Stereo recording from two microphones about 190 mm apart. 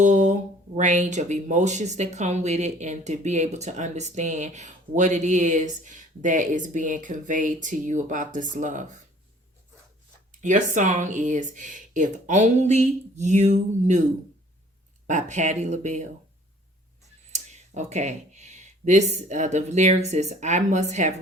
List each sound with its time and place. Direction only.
0.0 s speech: 40° right (ahead or behind)
10.4 s speech: 40° right (ahead or behind)
15.0 s speech: 40° right (ahead or behind)
17.3 s speech: 35° right (ahead or behind)